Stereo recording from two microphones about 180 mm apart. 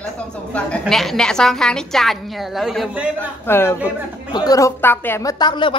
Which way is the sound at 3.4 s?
15° left (ahead or behind).